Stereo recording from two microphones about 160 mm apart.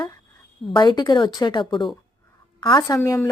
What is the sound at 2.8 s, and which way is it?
Speech, 20° left (ahead or behind).